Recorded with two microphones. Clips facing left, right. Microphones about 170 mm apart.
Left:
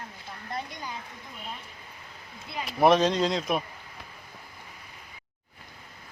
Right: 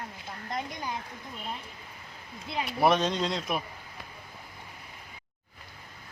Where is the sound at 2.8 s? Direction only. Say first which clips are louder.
Left 4 dB; centre (ahead or behind).